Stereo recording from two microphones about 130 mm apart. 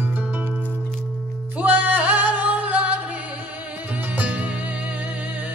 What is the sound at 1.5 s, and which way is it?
Music, 15° right (ahead or behind).